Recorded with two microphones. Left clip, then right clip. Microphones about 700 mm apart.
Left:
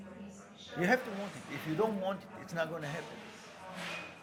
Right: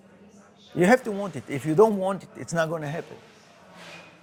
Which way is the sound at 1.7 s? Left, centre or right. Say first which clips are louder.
Right 14 dB; right.